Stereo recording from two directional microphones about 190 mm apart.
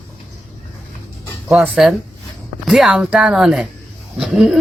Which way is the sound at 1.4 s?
10° right (ahead or behind).